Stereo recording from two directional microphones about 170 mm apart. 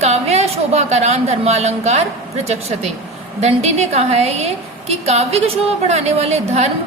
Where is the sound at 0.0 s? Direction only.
40° right (ahead or behind).